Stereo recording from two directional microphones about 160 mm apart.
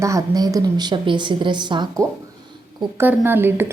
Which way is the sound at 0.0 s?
20° right (ahead or behind).